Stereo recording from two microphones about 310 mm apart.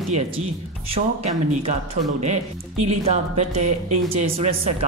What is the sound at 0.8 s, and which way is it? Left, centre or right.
Speech, centre.